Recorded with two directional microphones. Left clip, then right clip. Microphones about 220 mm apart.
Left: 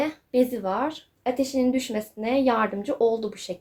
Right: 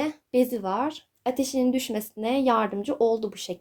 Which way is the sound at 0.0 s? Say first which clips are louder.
Left 1 dB; 40° right (ahead or behind).